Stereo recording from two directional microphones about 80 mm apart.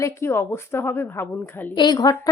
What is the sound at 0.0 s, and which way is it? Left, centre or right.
A woman's voice, left.